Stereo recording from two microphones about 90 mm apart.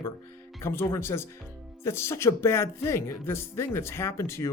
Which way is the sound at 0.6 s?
25° left (ahead or behind).